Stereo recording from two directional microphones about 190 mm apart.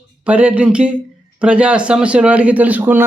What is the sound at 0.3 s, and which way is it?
Speech, 5° right (ahead or behind).